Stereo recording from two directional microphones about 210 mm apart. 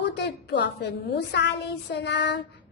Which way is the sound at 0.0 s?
55° left (ahead or behind).